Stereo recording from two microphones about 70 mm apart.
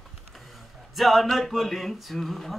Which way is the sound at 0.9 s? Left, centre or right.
Centre.